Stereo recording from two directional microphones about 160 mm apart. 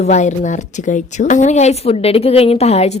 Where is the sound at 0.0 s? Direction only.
50° left (ahead or behind).